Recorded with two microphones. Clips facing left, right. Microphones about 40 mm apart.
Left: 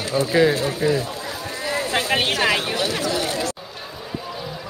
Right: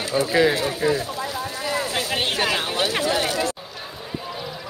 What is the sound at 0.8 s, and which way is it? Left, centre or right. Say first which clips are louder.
Speech: left 1 dB; centre.